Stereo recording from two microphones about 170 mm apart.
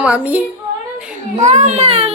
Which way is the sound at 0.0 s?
10° right (ahead or behind).